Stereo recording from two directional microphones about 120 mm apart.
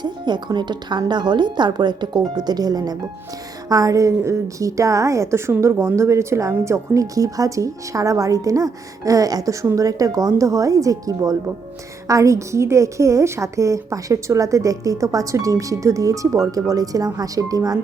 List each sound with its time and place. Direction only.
0.0 s a woman's voice: 40° right (ahead or behind)